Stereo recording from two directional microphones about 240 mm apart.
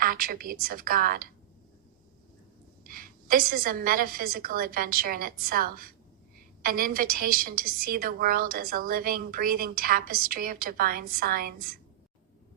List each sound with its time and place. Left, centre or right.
0.0 s a woman's voice: right
2.8 s a woman's voice: right